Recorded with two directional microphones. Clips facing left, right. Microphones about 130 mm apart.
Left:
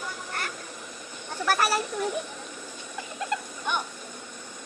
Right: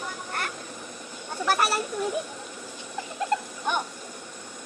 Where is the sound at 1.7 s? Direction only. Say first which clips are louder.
Even; 5° right (ahead or behind).